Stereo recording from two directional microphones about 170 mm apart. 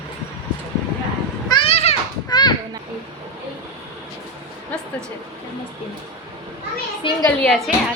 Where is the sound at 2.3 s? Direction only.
25° left (ahead or behind).